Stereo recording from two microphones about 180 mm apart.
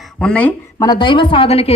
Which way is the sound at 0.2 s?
5° left (ahead or behind).